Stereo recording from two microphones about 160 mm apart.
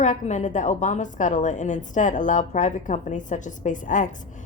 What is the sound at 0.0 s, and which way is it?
A woman's voice, 50° left (ahead or behind).